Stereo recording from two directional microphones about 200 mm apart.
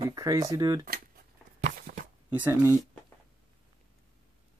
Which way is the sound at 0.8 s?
50° right (ahead or behind).